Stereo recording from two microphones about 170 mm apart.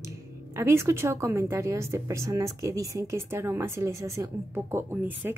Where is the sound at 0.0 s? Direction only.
15° right (ahead or behind).